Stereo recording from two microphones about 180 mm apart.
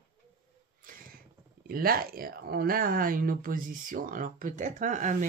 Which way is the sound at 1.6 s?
55° right (ahead or behind).